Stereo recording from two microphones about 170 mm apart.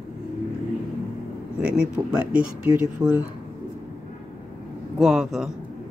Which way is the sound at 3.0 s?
20° right (ahead or behind).